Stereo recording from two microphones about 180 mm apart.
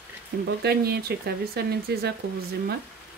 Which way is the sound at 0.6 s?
65° right (ahead or behind).